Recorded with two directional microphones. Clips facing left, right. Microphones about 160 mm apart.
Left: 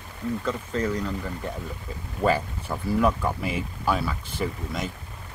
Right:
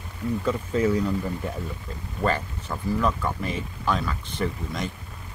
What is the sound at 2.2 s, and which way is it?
Speech, 10° left (ahead or behind).